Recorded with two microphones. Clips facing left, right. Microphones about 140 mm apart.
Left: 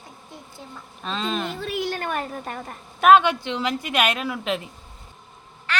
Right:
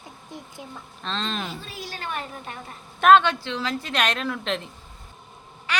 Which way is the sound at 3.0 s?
5° left (ahead or behind).